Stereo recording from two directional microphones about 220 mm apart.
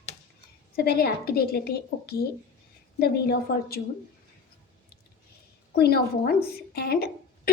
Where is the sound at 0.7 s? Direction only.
45° left (ahead or behind).